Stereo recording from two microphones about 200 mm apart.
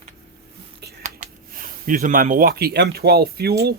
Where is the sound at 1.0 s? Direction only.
40° right (ahead or behind).